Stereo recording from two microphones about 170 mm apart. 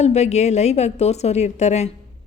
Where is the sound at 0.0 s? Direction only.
40° left (ahead or behind).